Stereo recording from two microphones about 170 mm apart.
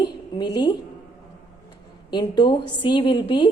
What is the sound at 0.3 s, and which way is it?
Speech, 25° left (ahead or behind).